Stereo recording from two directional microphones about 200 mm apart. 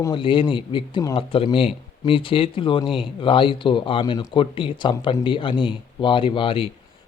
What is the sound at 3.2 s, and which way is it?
A man's voice, 25° left (ahead or behind).